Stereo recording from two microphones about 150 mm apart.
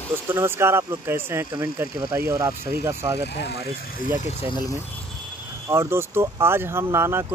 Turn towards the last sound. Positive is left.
turn(degrees=-15)  # may be behind; listen again after turning